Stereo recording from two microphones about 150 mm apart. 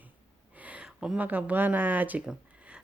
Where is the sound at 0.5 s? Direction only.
10° right (ahead or behind).